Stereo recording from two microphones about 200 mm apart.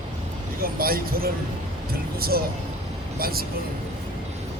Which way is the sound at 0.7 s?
50° right (ahead or behind).